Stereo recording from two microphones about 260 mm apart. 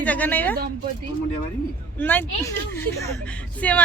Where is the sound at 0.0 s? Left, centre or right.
Centre.